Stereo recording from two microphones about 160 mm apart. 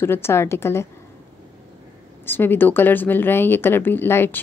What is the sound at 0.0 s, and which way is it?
Speech, 15° left (ahead or behind).